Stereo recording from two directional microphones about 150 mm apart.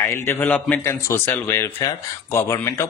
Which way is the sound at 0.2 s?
15° left (ahead or behind).